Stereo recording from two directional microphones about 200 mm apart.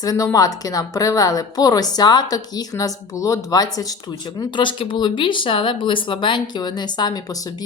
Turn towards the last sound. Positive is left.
turn(degrees=20)  # may be behind; listen again after turning